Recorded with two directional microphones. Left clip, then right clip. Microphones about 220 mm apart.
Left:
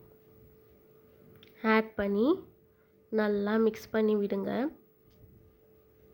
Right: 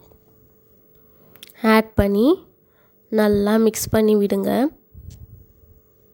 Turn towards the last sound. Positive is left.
turn(degrees=-75)  # may be behind; listen again after turning